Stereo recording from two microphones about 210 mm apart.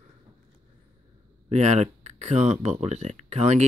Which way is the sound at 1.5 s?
35° right (ahead or behind).